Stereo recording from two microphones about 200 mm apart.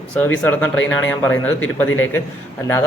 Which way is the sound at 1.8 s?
90° left.